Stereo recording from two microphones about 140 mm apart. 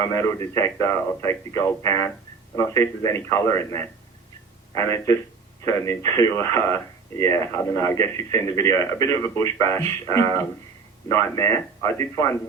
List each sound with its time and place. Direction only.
0.0 s speech: 20° left (ahead or behind)